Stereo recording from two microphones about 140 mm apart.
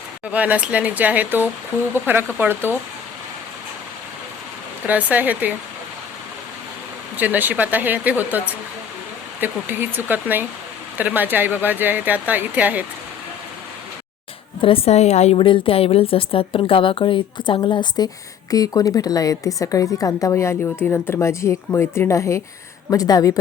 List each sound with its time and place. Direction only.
0.3 s speech: 10° right (ahead or behind)
4.9 s speech: 10° right (ahead or behind)
7.2 s speech: 10° right (ahead or behind)
14.6 s a woman's voice: 40° left (ahead or behind)
15.4 s a woman's voice: 35° left (ahead or behind)